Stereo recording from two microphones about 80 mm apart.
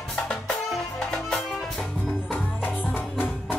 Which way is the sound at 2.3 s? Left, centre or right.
Left.